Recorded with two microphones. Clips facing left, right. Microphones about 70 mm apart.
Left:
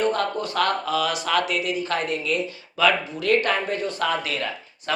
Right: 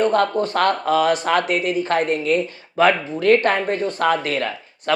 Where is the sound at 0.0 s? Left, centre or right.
Right.